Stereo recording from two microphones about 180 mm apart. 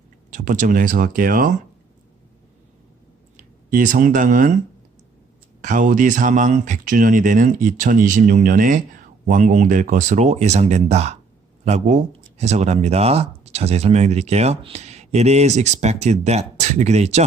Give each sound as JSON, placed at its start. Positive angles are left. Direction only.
{"t": 0.3, "sound": "speech", "side_deg": -45}
{"t": 3.3, "sound": "speech", "side_deg": -45}
{"t": 5.6, "sound": "speech", "side_deg": -45}